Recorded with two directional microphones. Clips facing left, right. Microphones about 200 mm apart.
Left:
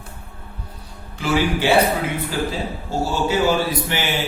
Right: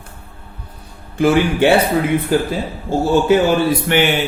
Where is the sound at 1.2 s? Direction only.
55° right (ahead or behind).